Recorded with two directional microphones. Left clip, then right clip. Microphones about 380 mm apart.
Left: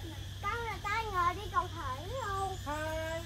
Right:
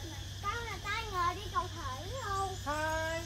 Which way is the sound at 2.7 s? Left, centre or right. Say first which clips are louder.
Right 2 dB; right.